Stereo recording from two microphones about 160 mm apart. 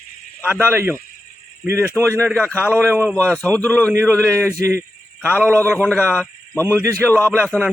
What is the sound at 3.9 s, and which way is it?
Speech, 15° right (ahead or behind).